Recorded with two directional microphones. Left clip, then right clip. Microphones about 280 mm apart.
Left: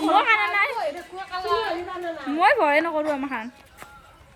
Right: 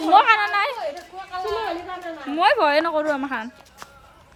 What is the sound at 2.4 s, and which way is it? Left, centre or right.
A woman's voice, centre.